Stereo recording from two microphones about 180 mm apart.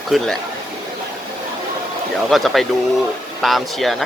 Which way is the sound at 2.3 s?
Centre (ahead or behind).